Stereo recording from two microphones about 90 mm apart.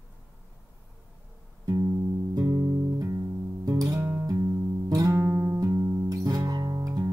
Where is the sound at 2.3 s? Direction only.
40° right (ahead or behind).